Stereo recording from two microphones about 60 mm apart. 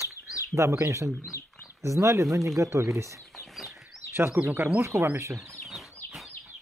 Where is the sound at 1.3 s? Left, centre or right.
Left.